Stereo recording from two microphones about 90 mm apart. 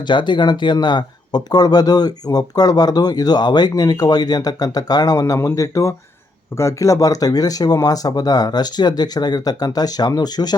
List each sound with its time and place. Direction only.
0.1 s speech: 60° left (ahead or behind)